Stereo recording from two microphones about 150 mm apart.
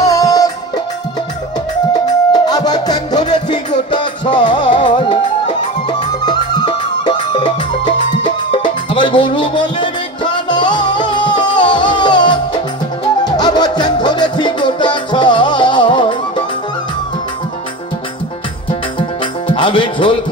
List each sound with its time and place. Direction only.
0.0 s music: 20° left (ahead or behind)
2.0 s music: 25° left (ahead or behind)
18.9 s music: 35° left (ahead or behind)